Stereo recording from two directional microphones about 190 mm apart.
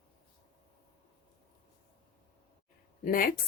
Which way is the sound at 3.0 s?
45° left (ahead or behind).